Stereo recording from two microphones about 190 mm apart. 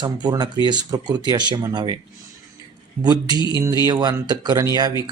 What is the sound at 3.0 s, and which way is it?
Speech, 20° right (ahead or behind).